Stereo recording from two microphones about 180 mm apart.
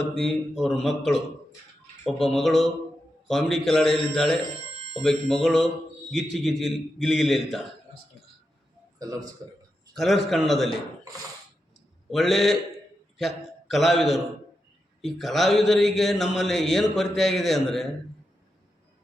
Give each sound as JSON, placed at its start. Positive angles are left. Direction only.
{"t": 0.1, "sound": "speech", "side_deg": 0}
{"t": 9.0, "sound": "a man's voice", "side_deg": -20}
{"t": 9.9, "sound": "speech", "side_deg": 0}
{"t": 12.1, "sound": "a man's voice", "side_deg": 0}